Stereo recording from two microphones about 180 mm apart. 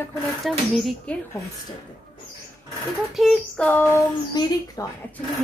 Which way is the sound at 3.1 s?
Centre (ahead or behind).